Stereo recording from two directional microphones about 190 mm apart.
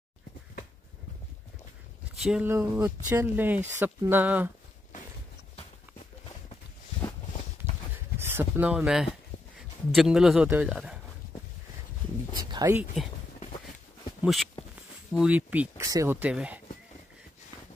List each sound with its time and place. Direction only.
2.1 s speech: 5° right (ahead or behind)
6.2 s a sound: 25° left (ahead or behind)
8.2 s a sound: 10° right (ahead or behind)
9.9 s a man's voice: 5° right (ahead or behind)
12.4 s speech: 20° right (ahead or behind)
14.2 s a man's voice: centre (ahead or behind)